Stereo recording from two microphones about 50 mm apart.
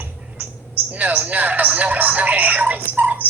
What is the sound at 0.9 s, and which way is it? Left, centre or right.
Speech, right.